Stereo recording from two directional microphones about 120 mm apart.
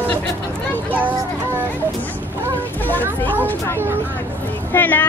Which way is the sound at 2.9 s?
15° left (ahead or behind).